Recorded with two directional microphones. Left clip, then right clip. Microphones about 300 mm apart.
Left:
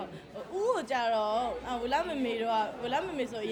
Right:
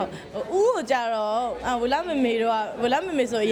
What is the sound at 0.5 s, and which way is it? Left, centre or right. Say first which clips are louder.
A woman's voice: right 8 dB; right.